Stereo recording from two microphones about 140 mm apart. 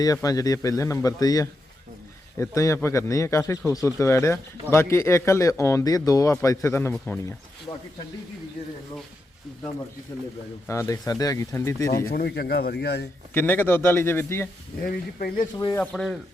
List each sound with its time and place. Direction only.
0.0 s speech: 25° left (ahead or behind)
6.9 s a man's voice: 5° left (ahead or behind)
10.7 s speech: 20° left (ahead or behind)
12.1 s speech: 90° left
13.3 s a man's voice: 15° left (ahead or behind)
14.8 s speech: 90° left
15.5 s speech: 25° left (ahead or behind)
15.8 s speech: 5° left (ahead or behind)